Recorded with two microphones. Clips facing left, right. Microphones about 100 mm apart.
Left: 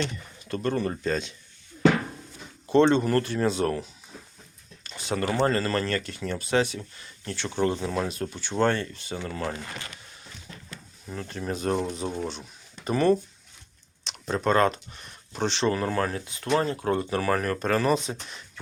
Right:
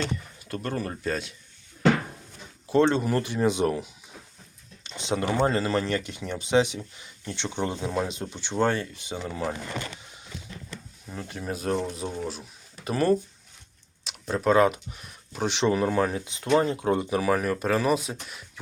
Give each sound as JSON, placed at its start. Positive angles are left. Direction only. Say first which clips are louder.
{"t": 0.3, "sound": "speech", "louder": "left 6 dB", "side_deg": -5}
{"t": 2.6, "sound": "speech", "louder": "left 2 dB", "side_deg": -5}
{"t": 4.8, "sound": "a sound", "louder": "right 1 dB", "side_deg": -20}
{"t": 5.3, "sound": "speech", "louder": "even", "side_deg": -10}
{"t": 8.5, "sound": "speech", "louder": "left 1 dB", "side_deg": -10}
{"t": 11.1, "sound": "speech", "louder": "left 2 dB", "side_deg": -5}
{"t": 15.5, "sound": "speech", "louder": "right 3 dB", "side_deg": -15}